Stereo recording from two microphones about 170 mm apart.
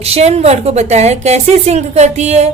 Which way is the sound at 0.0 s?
40° right (ahead or behind).